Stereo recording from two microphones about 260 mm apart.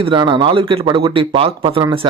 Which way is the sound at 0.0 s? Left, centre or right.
Centre.